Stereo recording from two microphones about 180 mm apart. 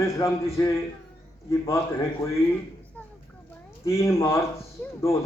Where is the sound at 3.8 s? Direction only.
15° left (ahead or behind).